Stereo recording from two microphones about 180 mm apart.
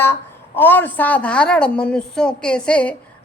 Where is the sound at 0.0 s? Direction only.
10° left (ahead or behind).